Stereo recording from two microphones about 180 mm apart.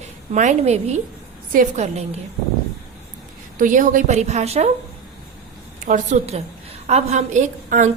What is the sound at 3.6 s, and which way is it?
A woman's voice, 45° right (ahead or behind).